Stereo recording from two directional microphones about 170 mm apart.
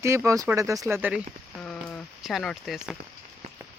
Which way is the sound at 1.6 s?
5° left (ahead or behind).